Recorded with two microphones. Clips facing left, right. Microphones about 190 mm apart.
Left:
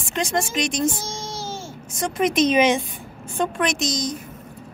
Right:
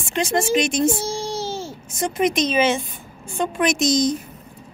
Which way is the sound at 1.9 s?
5° right (ahead or behind).